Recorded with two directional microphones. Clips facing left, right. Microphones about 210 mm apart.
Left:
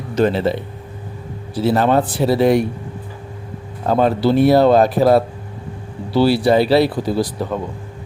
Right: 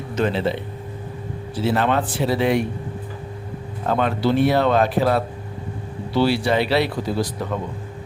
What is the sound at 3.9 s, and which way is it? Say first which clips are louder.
A man's voice: left 5 dB; 35° left (ahead or behind).